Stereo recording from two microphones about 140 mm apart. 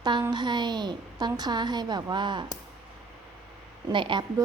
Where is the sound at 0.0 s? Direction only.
30° right (ahead or behind).